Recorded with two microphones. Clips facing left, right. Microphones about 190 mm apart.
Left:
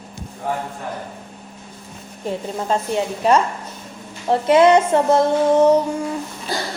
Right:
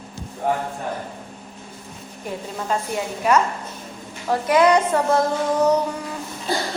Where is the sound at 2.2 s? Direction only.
25° left (ahead or behind).